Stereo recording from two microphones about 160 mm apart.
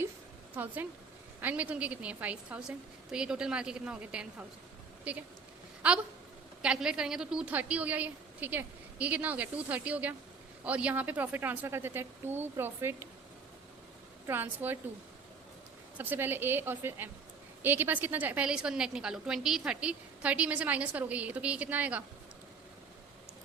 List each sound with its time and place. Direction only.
0.5 s a woman's voice: 10° right (ahead or behind)
14.3 s a woman's voice: 10° right (ahead or behind)
16.0 s a woman's voice: 10° right (ahead or behind)